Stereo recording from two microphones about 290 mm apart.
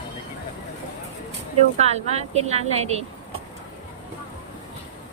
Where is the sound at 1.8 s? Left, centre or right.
Right.